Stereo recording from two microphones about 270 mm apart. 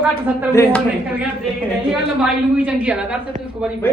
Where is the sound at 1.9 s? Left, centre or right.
Centre.